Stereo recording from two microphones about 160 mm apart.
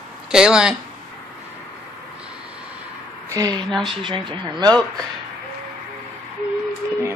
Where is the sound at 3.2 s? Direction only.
20° right (ahead or behind).